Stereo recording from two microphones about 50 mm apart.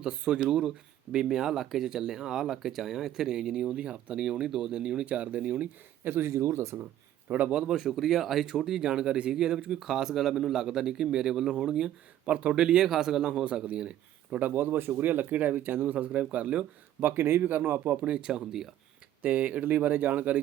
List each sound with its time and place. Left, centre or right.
0.0 s speech: centre
5.0 s speech: right
6.1 s speech: right
7.3 s speech: right
7.7 s speech: centre
12.2 s speech: right
14.4 s speech: right
17.0 s speech: right
17.9 s speech: right
19.2 s speech: right